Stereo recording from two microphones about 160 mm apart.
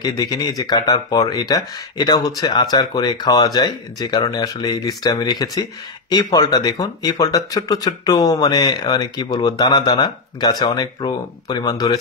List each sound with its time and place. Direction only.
0.0 s speech: 25° left (ahead or behind)